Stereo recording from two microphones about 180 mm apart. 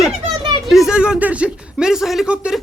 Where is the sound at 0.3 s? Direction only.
25° right (ahead or behind).